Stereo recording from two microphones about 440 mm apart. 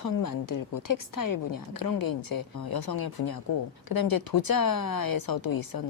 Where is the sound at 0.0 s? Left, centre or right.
Left.